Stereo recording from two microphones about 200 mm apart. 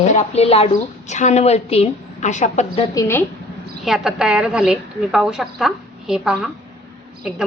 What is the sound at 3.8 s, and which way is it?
A woman's voice, centre (ahead or behind).